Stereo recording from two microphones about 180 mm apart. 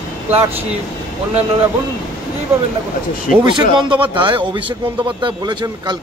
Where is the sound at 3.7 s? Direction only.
25° right (ahead or behind).